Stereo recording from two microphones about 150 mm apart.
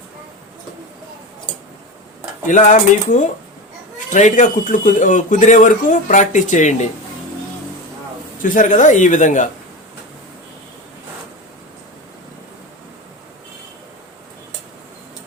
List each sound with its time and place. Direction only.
2.5 s speech: 55° left (ahead or behind)
8.4 s speech: 60° left (ahead or behind)